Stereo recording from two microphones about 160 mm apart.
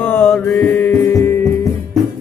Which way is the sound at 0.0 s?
10° left (ahead or behind).